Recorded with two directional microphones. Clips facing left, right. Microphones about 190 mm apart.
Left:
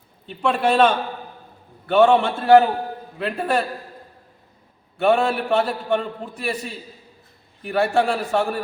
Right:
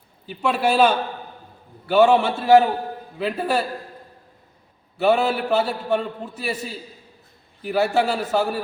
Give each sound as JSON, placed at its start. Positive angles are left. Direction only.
{"t": 0.3, "sound": "a man's voice", "side_deg": -5}
{"t": 4.9, "sound": "a man's voice", "side_deg": -5}